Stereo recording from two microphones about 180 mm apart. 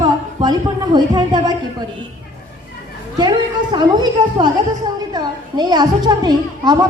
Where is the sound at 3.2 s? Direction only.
25° right (ahead or behind).